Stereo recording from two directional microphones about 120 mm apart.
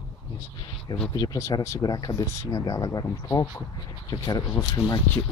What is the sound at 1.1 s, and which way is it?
Speech, 35° left (ahead or behind).